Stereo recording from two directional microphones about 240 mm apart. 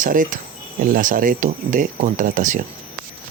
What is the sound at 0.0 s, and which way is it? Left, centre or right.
Speech, right.